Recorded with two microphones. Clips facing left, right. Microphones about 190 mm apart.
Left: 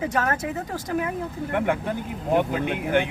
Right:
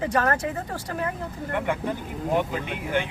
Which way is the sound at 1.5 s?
55° left (ahead or behind).